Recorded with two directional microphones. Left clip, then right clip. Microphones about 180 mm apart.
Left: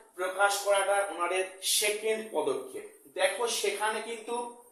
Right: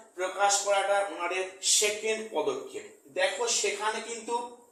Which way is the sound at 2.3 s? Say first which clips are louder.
Right 2 dB; 15° left (ahead or behind).